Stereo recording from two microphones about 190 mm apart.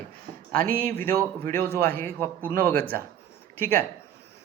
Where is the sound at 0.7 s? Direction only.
10° left (ahead or behind).